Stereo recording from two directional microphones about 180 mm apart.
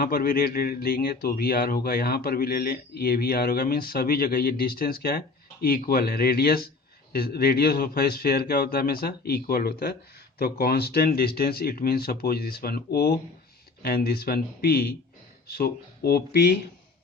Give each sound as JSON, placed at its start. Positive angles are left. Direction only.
{"t": 0.0, "sound": "speech", "side_deg": 55}